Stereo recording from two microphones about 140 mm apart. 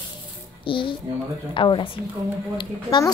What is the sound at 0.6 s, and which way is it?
A woman's voice, 40° left (ahead or behind).